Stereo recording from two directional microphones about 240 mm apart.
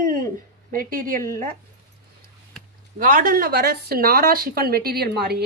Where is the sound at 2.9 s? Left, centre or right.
Right.